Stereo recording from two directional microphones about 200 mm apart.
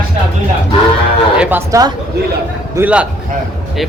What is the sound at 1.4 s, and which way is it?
A man's voice, 10° right (ahead or behind).